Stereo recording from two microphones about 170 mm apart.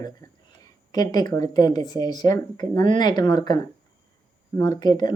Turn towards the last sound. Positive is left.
turn(degrees=25)  # may be behind; listen again after turning